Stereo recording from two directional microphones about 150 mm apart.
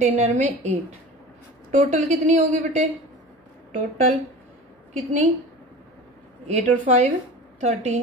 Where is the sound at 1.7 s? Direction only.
50° right (ahead or behind).